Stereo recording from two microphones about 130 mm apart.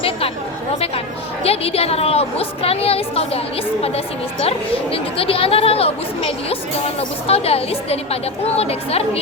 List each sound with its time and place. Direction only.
1.5 s a woman's voice: 50° left (ahead or behind)